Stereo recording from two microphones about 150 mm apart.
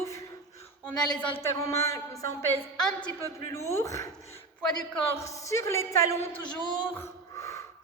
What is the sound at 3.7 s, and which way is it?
A man's voice, 20° left (ahead or behind).